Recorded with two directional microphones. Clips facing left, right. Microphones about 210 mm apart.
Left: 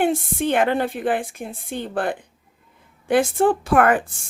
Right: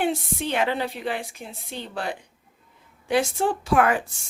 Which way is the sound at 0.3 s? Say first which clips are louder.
Left 8 dB; 50° left (ahead or behind).